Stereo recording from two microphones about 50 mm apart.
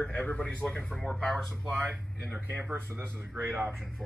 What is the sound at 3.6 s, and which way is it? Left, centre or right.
Speech, right.